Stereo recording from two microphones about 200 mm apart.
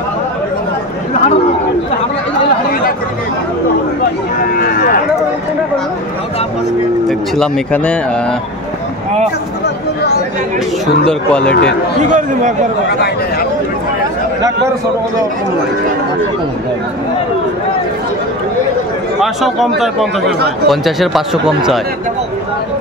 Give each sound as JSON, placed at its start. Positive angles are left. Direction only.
{"t": 4.6, "sound": "a sound", "side_deg": 50}
{"t": 7.1, "sound": "speech", "side_deg": 5}
{"t": 11.1, "sound": "speech", "side_deg": 5}
{"t": 12.0, "sound": "speech", "side_deg": -40}
{"t": 19.2, "sound": "speech", "side_deg": 0}